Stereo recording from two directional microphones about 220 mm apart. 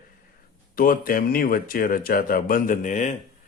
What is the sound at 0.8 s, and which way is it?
A man's voice, 40° left (ahead or behind).